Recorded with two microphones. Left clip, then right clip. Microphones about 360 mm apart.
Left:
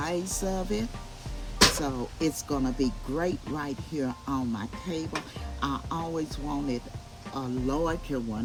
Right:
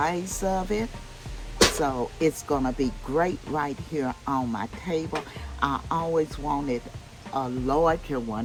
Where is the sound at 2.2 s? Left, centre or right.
Centre.